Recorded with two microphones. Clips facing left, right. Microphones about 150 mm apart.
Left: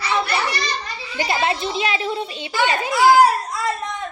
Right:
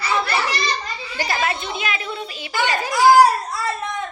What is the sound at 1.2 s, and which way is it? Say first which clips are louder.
A child's voice: left 3 dB; 25° left (ahead or behind).